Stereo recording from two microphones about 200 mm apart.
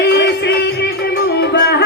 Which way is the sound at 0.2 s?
60° left (ahead or behind).